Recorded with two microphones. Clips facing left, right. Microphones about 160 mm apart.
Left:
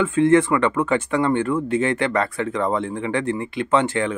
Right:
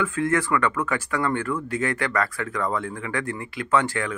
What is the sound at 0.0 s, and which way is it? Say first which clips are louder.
Speech: left 8 dB; 25° left (ahead or behind).